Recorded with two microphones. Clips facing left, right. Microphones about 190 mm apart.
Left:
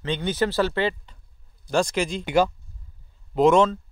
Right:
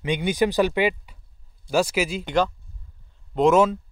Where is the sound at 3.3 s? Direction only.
Centre (ahead or behind).